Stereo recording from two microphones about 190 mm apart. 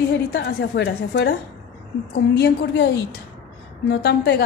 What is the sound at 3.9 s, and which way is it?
Speech, 60° left (ahead or behind).